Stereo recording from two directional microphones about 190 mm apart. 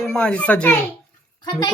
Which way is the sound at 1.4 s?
25° left (ahead or behind).